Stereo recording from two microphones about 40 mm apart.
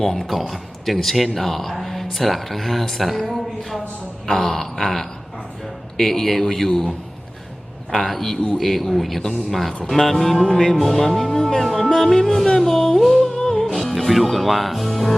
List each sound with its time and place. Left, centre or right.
0.0 s speech: centre
4.3 s music: centre
6.5 s speech: centre
10.4 s music: centre
11.9 s music: centre
12.1 s speech: centre
13.2 s music: centre